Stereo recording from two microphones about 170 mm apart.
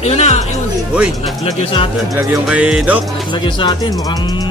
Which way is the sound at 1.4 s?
35° left (ahead or behind).